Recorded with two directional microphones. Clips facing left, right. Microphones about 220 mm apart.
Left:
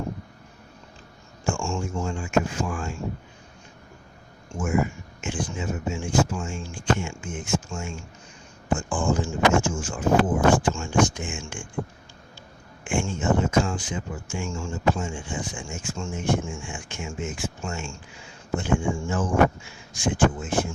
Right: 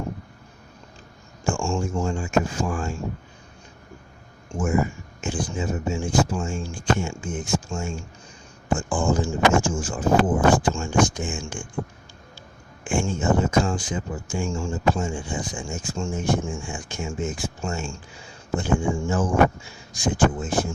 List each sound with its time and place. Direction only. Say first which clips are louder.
1.5 s speech: right 3 dB; 35° right (ahead or behind)
4.5 s speech: right 2 dB; 35° right (ahead or behind)
12.8 s speech: right 2 dB; 35° right (ahead or behind)